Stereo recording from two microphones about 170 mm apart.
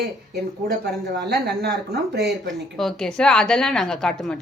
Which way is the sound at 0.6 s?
65° right (ahead or behind).